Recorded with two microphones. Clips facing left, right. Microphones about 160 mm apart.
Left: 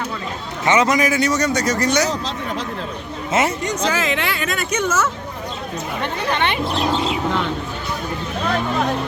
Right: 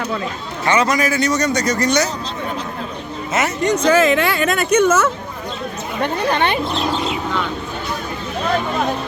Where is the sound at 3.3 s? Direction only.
25° left (ahead or behind).